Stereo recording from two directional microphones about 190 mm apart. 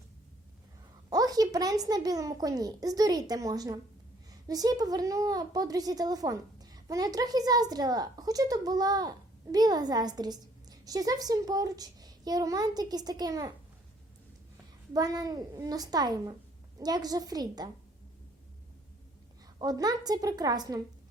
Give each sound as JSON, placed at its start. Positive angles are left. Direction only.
{"t": 1.1, "sound": "a woman's voice", "side_deg": -20}
{"t": 14.9, "sound": "a woman's voice", "side_deg": -20}
{"t": 19.5, "sound": "a woman's voice", "side_deg": -20}